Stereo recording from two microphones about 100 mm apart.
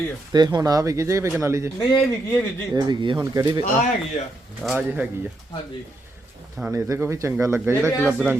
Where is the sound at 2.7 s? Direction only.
40° right (ahead or behind).